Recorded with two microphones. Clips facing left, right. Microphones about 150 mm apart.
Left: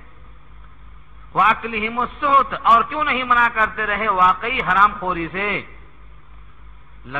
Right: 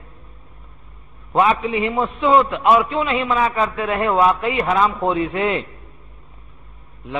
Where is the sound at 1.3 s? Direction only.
25° right (ahead or behind).